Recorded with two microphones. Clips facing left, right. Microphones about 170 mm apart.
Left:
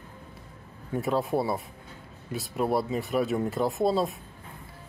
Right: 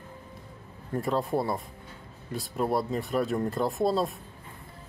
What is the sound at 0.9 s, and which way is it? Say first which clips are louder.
Speech: left 1 dB; 5° left (ahead or behind).